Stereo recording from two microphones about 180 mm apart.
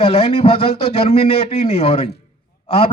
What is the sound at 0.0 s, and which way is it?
Speech, 30° left (ahead or behind).